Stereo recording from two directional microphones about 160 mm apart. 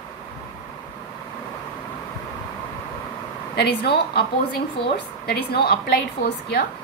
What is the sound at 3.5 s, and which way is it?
A woman's voice, 90° left.